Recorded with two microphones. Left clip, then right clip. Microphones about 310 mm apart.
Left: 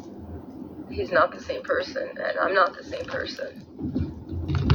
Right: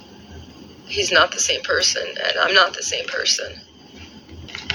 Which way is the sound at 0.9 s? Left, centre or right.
Centre.